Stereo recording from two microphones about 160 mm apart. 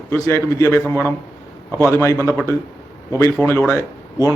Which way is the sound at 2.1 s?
5° left (ahead or behind).